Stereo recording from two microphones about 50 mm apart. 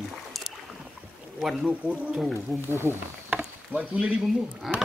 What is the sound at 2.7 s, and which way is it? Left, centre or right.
Speech, right.